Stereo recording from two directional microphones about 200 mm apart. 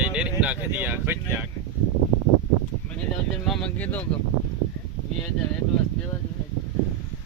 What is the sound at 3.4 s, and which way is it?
Speech, 5° left (ahead or behind).